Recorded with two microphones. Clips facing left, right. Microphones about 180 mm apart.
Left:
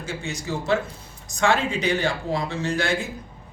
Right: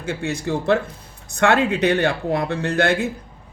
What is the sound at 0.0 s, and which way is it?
Speech, 60° right (ahead or behind).